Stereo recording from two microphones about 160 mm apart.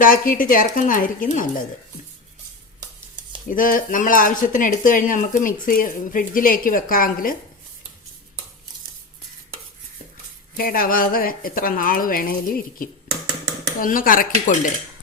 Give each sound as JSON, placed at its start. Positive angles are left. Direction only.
{"t": 0.0, "sound": "speech", "side_deg": 60}
{"t": 3.5, "sound": "speech", "side_deg": 60}
{"t": 10.6, "sound": "speech", "side_deg": 65}